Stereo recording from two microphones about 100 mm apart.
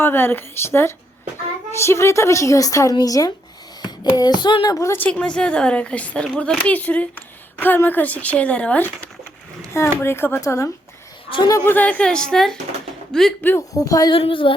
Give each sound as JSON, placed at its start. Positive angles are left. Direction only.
{"t": 0.0, "sound": "a woman's voice", "side_deg": 20}
{"t": 4.9, "sound": "speech", "side_deg": 15}
{"t": 9.7, "sound": "a woman's voice", "side_deg": 25}
{"t": 11.6, "sound": "speech", "side_deg": 20}
{"t": 13.6, "sound": "speech", "side_deg": 35}
{"t": 14.1, "sound": "speech", "side_deg": 65}